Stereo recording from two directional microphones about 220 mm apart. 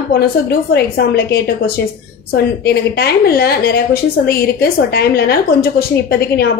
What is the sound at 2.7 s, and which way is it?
A woman's voice, 45° left (ahead or behind).